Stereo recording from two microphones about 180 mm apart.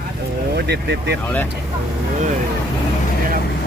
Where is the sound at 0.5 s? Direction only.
65° right (ahead or behind).